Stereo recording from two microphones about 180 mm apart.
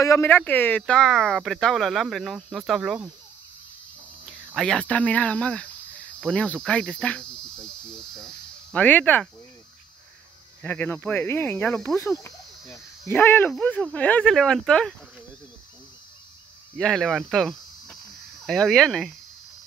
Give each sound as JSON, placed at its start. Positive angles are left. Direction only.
{"t": 0.0, "sound": "speech", "side_deg": 15}
{"t": 4.6, "sound": "cricket", "side_deg": 5}
{"t": 6.2, "sound": "speech", "side_deg": 5}
{"t": 8.7, "sound": "cricket", "side_deg": 10}
{"t": 10.6, "sound": "cricket", "side_deg": 10}
{"t": 13.1, "sound": "speech", "side_deg": 10}
{"t": 16.7, "sound": "speech", "side_deg": 5}